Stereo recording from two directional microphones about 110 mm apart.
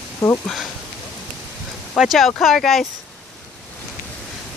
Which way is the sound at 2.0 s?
Centre (ahead or behind).